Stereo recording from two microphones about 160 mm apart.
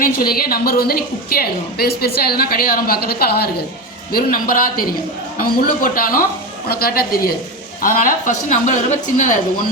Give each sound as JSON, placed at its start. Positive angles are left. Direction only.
{"t": 0.0, "sound": "a woman's voice", "side_deg": 70}
{"t": 4.1, "sound": "a man's voice", "side_deg": 65}
{"t": 7.8, "sound": "a woman's voice", "side_deg": 55}